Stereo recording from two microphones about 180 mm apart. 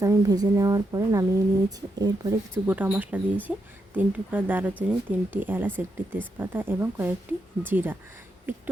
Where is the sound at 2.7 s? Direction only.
10° right (ahead or behind).